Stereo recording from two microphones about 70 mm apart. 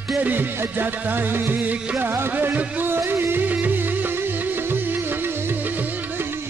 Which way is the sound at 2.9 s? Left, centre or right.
Right.